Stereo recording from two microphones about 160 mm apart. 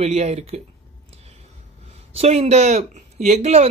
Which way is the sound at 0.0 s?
40° right (ahead or behind).